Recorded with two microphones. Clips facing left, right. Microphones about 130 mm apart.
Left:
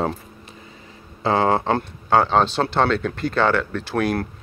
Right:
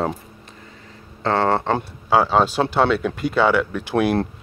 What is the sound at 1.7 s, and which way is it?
Speech, 5° right (ahead or behind).